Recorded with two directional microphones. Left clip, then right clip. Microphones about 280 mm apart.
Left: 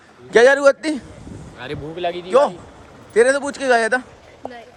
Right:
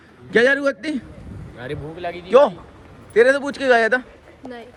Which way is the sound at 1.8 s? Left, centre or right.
Left.